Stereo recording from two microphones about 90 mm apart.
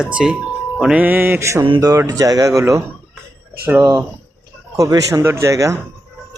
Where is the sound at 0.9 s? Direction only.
20° right (ahead or behind).